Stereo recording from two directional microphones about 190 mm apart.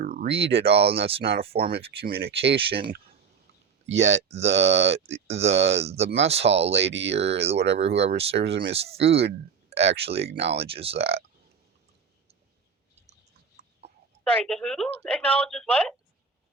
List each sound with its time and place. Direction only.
0.0 s a sound: 55° right (ahead or behind)
0.9 s speech: 30° right (ahead or behind)
2.0 s speech: 55° right (ahead or behind)
2.6 s speech: 30° right (ahead or behind)
3.8 s speech: 75° right (ahead or behind)
4.3 s speech: 35° right (ahead or behind)
6.7 s speech: 70° right (ahead or behind)
7.3 s speech: 35° right (ahead or behind)
14.3 s speech: 5° left (ahead or behind)